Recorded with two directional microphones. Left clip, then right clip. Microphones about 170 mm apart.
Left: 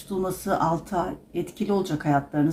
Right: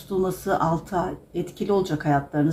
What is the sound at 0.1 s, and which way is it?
Speech, 15° left (ahead or behind).